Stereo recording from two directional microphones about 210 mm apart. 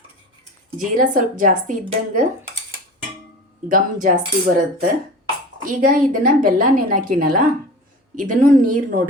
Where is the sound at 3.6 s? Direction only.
40° right (ahead or behind).